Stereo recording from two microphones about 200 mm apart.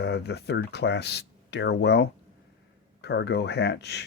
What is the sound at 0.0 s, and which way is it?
Speech, 55° left (ahead or behind).